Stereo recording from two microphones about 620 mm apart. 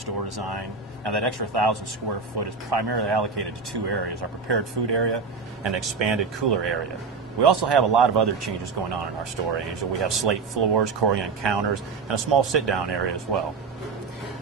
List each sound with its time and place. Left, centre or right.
0.0 s a man's voice: right